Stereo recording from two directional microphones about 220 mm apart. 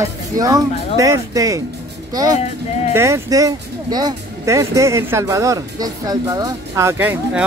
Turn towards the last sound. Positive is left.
turn(degrees=-10)  # may be behind; listen again after turning